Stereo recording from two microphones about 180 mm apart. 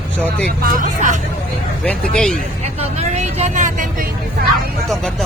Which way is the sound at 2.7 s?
40° right (ahead or behind).